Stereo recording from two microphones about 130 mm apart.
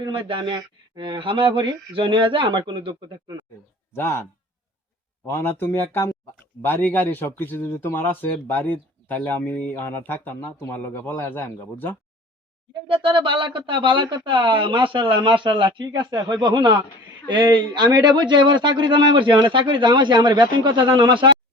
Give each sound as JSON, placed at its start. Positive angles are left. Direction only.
{"t": 0.0, "sound": "a man's voice", "side_deg": -40}
{"t": 3.9, "sound": "speech", "side_deg": 20}
{"t": 5.2, "sound": "a man's voice", "side_deg": 20}
{"t": 12.9, "sound": "a man's voice", "side_deg": -40}